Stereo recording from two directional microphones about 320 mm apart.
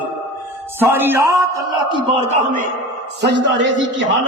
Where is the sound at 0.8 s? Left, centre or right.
Centre; by 2.6 s right.